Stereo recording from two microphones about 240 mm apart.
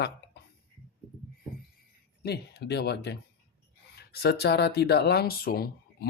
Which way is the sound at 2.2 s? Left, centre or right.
Left.